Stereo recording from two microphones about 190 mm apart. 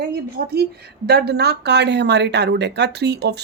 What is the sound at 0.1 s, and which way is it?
A woman's voice, 55° right (ahead or behind).